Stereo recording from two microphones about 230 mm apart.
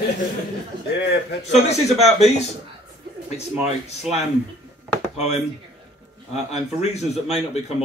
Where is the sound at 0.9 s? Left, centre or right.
Left.